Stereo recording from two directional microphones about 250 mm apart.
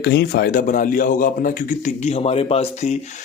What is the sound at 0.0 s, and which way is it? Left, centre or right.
A man's voice, left.